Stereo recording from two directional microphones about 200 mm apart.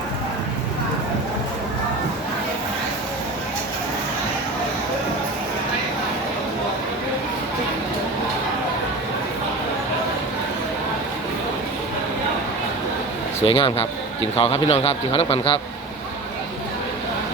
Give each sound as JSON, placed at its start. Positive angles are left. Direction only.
{"t": 13.4, "sound": "a man's voice", "side_deg": 25}